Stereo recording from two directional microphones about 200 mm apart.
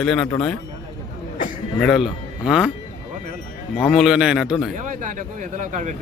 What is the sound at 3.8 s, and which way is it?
Speech, centre (ahead or behind).